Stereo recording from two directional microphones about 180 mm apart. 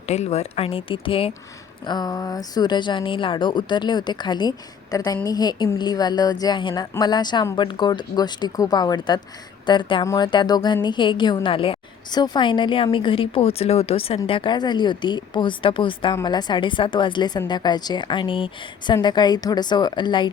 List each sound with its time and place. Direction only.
0.1 s speech: 35° left (ahead or behind)